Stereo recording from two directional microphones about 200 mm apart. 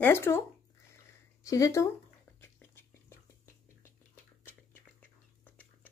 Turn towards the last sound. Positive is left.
turn(degrees=10)  # may be behind; listen again after turning